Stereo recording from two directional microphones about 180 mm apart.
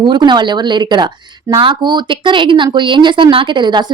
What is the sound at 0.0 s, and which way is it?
A woman's voice, 25° right (ahead or behind).